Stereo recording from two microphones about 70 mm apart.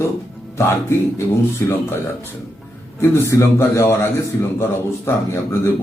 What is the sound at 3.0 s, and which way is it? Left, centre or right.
A man's voice, left.